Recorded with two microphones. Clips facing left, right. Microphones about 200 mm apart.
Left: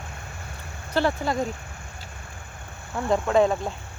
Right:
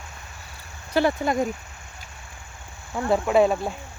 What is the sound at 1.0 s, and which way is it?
Speech, 15° right (ahead or behind).